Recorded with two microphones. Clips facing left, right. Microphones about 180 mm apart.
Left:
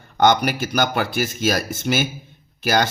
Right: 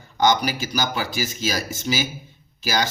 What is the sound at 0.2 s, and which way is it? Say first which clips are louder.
Speech: left 3 dB; 60° left (ahead or behind).